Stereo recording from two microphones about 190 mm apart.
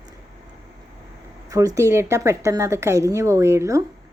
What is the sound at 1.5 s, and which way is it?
A woman's voice, 15° right (ahead or behind).